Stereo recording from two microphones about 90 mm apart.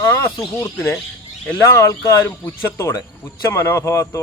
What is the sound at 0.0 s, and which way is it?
Speech, 25° left (ahead or behind).